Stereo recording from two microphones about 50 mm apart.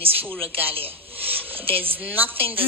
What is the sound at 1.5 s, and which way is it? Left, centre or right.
Speech, right.